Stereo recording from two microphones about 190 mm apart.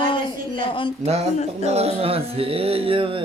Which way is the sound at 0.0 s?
25° left (ahead or behind).